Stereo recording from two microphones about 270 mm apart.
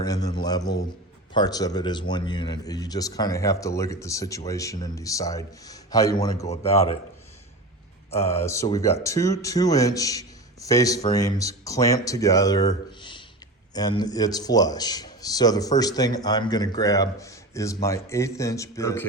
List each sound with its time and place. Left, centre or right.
0.0 s a man's voice: centre
8.3 s a man's voice: centre